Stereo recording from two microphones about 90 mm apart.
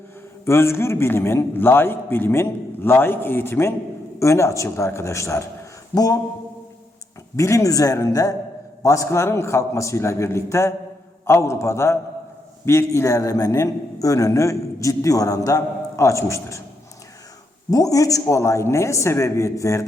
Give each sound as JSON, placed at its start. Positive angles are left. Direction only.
{"t": 0.4, "sound": "a man's voice", "side_deg": 30}
{"t": 5.9, "sound": "speech", "side_deg": 45}
{"t": 7.3, "sound": "a man's voice", "side_deg": 35}
{"t": 17.7, "sound": "a man's voice", "side_deg": 40}